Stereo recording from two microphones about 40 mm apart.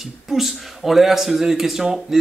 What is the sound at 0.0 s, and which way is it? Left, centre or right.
A man's voice, centre.